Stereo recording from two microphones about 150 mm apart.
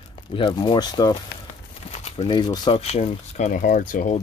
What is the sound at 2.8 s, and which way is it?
Speech, 45° left (ahead or behind).